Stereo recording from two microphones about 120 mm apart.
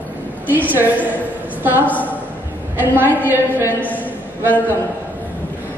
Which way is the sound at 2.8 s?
15° right (ahead or behind).